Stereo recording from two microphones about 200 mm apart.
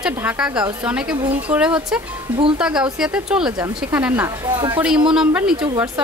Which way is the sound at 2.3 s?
25° right (ahead or behind).